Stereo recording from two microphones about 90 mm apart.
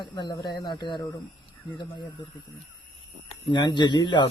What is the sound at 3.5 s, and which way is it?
Speech, 55° left (ahead or behind).